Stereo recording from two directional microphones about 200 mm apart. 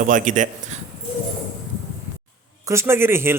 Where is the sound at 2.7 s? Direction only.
10° right (ahead or behind).